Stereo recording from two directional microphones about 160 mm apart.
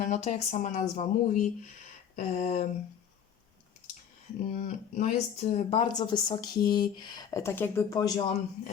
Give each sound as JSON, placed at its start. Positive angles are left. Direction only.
{"t": 0.0, "sound": "speech", "side_deg": 45}
{"t": 4.4, "sound": "speech", "side_deg": 50}
{"t": 5.8, "sound": "speech", "side_deg": 25}